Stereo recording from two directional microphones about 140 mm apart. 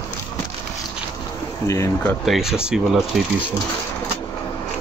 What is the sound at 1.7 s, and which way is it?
Speech, 20° left (ahead or behind).